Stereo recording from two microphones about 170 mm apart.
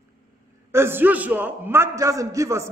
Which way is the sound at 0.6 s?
15° right (ahead or behind).